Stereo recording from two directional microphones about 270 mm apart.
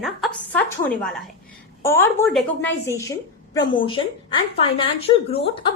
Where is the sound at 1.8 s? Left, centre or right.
Centre.